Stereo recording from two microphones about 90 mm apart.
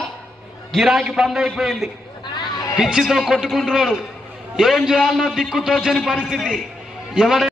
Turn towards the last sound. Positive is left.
turn(degrees=-5)  # may be behind; listen again after turning